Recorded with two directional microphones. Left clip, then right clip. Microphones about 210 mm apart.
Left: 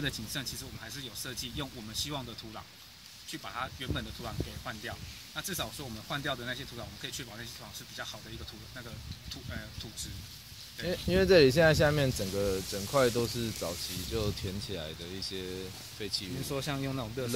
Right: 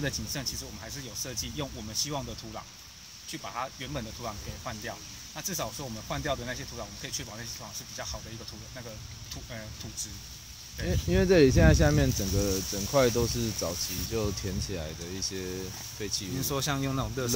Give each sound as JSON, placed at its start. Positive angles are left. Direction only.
{"t": 0.0, "sound": "speech", "side_deg": 0}
{"t": 10.9, "sound": "speech", "side_deg": 45}
{"t": 12.9, "sound": "speech", "side_deg": 15}
{"t": 16.4, "sound": "speech", "side_deg": -45}